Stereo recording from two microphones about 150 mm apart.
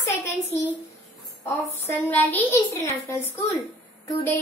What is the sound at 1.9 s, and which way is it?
A child's voice, 10° left (ahead or behind).